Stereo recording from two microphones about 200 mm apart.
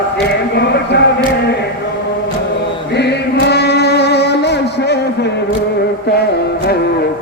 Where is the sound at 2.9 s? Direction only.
55° left (ahead or behind).